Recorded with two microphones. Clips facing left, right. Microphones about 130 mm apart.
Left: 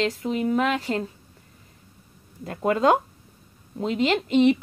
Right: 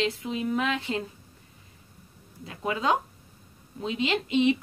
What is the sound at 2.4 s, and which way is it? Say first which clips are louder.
Speech: left 7 dB; 50° left (ahead or behind).